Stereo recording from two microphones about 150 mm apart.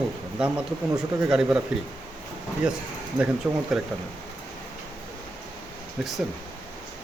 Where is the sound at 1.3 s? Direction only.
5° right (ahead or behind).